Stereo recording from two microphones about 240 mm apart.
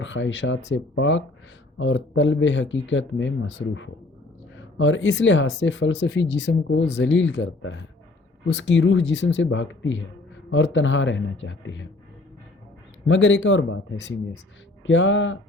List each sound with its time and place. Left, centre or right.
0.0 s speech: left
13.1 s speech: left